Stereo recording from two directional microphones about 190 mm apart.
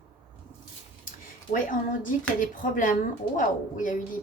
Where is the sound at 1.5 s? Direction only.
45° left (ahead or behind).